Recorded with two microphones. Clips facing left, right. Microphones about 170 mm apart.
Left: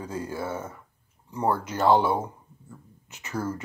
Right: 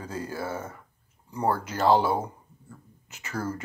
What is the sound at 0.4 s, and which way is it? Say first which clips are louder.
Speech: even; 10° right (ahead or behind).